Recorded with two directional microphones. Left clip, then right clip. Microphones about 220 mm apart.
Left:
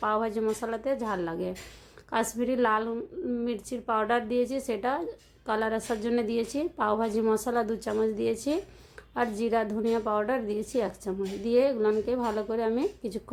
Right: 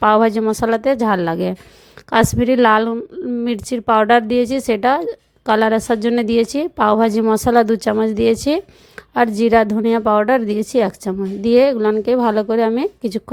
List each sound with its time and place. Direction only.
0.0 s a woman's voice: 40° right (ahead or behind)